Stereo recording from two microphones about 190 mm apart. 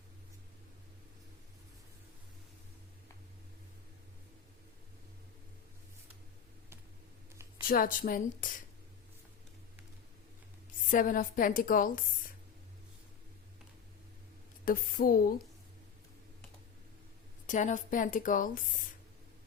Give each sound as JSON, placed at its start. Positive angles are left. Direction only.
{"t": 7.7, "sound": "a woman's voice", "side_deg": 50}
{"t": 10.9, "sound": "a woman's voice", "side_deg": 45}
{"t": 14.6, "sound": "a woman's voice", "side_deg": 50}
{"t": 17.4, "sound": "a woman's voice", "side_deg": 40}